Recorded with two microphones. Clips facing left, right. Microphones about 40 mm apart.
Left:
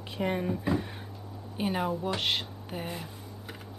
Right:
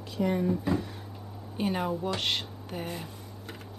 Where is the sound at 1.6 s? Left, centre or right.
Centre.